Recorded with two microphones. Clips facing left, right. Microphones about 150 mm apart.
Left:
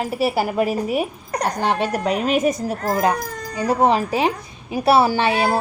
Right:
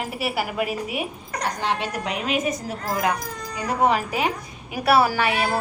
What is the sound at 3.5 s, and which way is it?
A woman's voice, 30° left (ahead or behind).